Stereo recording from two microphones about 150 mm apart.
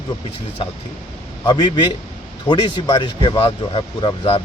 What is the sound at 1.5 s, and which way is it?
A man's voice, 25° left (ahead or behind).